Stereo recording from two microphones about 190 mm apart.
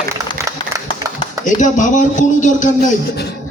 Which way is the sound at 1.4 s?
40° left (ahead or behind).